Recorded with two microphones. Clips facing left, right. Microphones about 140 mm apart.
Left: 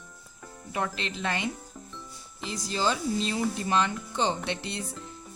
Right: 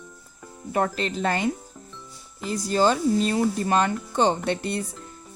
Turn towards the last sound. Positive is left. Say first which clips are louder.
# right 7 dB
turn(degrees=-50)  # may be behind; listen again after turning